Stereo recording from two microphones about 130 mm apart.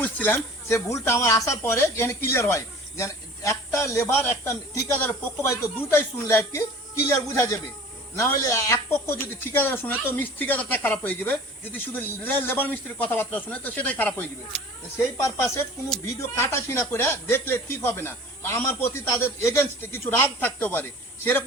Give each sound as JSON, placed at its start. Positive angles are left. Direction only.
{"t": 0.0, "sound": "speech", "side_deg": 15}
{"t": 8.2, "sound": "speech", "side_deg": 20}